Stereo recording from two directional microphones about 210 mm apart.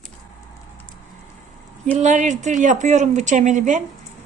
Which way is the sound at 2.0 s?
35° right (ahead or behind).